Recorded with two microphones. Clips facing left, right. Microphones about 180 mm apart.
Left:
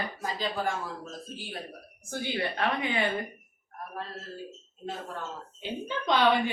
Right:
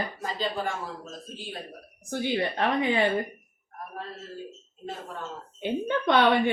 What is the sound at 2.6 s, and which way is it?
Speech, 35° right (ahead or behind).